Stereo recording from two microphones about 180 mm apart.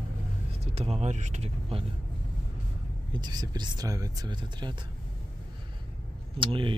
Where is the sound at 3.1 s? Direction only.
25° right (ahead or behind).